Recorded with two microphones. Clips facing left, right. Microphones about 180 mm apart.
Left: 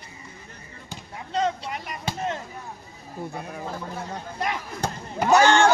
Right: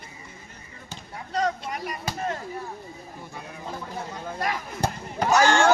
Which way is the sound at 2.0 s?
25° left (ahead or behind).